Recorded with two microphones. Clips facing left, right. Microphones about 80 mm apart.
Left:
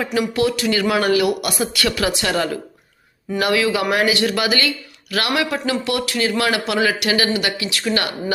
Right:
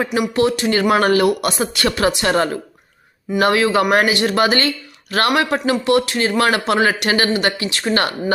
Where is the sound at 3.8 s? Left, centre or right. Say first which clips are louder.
Right 4 dB; right.